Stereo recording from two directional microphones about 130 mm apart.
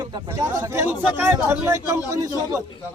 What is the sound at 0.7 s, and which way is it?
A man's voice, 15° right (ahead or behind).